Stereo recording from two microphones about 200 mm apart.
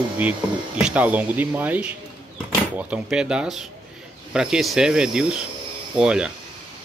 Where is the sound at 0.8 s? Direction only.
5° right (ahead or behind).